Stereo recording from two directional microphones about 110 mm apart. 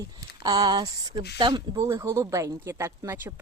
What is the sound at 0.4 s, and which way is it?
Speech, 35° right (ahead or behind).